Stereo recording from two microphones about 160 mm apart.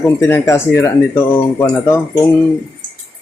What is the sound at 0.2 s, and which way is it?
Speech, 20° left (ahead or behind).